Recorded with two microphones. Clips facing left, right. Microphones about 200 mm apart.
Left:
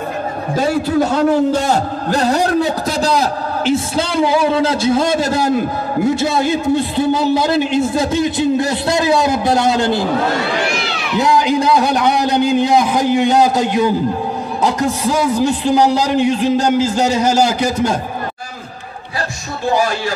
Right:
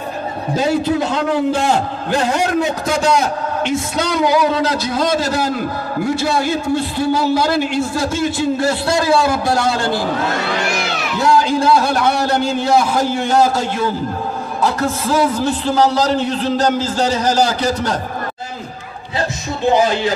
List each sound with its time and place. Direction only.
1.1 s a man's voice: 40° left (ahead or behind); by 10.0 s 20° left (ahead or behind)
11.1 s a man's voice: 20° left (ahead or behind)
19.6 s music: 20° right (ahead or behind)